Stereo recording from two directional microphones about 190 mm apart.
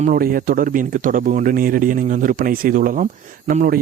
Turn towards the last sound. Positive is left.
turn(degrees=-45)  # may be behind; listen again after turning